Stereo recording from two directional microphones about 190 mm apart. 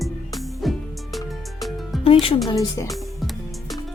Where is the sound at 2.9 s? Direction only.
Centre (ahead or behind).